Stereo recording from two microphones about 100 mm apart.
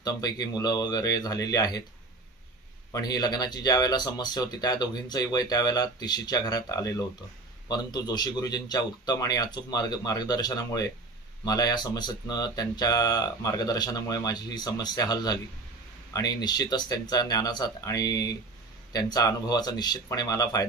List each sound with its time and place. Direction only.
0.0 s speech: 40° left (ahead or behind)
2.9 s speech: 40° left (ahead or behind)